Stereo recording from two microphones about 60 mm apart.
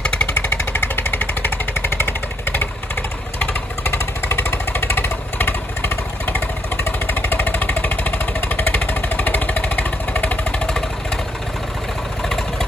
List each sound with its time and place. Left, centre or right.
0.0 s vehicle: centre
0.3 s vehicle: left
3.8 s vehicle: left